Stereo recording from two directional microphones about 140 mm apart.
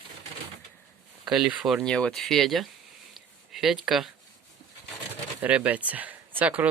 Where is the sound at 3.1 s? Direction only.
Centre (ahead or behind).